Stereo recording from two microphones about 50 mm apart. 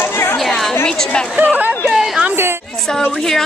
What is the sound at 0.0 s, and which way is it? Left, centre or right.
Chatter, left.